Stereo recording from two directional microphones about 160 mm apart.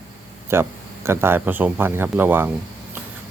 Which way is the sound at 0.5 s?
15° right (ahead or behind).